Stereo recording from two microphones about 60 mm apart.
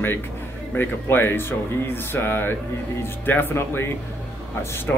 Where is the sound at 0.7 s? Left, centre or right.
Left.